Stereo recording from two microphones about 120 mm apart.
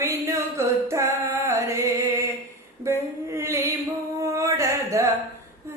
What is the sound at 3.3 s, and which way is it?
Mantra, 25° right (ahead or behind).